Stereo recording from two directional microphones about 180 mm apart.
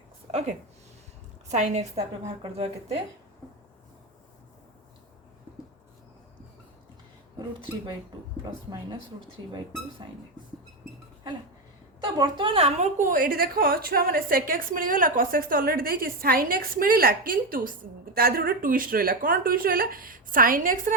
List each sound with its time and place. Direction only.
0.3 s a woman's voice: 35° right (ahead or behind)
11.9 s a woman's voice: 25° right (ahead or behind); by 20.9 s 50° right (ahead or behind)